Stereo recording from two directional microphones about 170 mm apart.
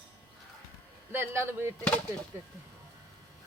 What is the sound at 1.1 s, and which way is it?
Speech, 10° right (ahead or behind).